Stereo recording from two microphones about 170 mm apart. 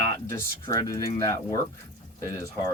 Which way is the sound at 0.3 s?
20° left (ahead or behind).